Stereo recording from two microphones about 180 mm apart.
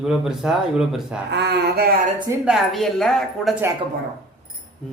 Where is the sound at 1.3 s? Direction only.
65° right (ahead or behind).